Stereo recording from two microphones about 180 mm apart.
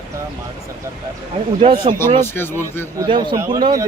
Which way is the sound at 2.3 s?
10° left (ahead or behind).